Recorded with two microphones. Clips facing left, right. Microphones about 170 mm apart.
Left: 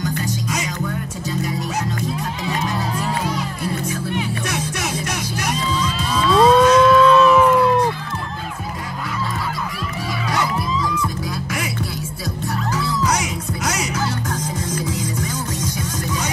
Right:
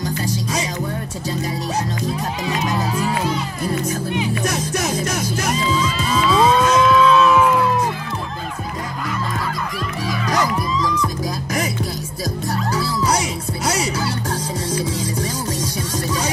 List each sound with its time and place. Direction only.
0.2 s music: 35° right (ahead or behind)
4.5 s music: 40° right (ahead or behind)
5.7 s moo: 5° right (ahead or behind)
12.4 s music: 35° right (ahead or behind)